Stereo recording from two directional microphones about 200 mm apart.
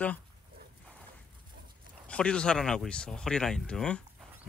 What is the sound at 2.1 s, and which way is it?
Speech, 5° left (ahead or behind).